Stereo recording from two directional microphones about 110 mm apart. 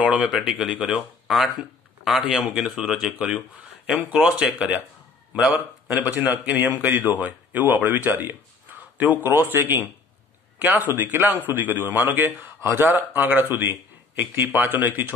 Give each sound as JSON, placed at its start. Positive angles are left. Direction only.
{"t": 0.0, "sound": "speech", "side_deg": -10}